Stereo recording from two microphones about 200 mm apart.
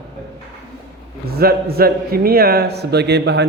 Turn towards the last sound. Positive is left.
turn(degrees=-55)  # may be behind; listen again after turning